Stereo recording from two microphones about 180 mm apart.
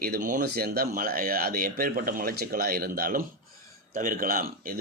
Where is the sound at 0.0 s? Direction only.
50° right (ahead or behind).